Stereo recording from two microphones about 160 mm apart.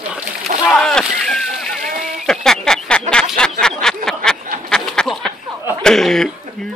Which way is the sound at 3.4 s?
5° left (ahead or behind).